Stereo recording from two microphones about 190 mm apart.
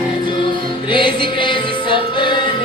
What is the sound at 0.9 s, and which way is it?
Music, 25° left (ahead or behind).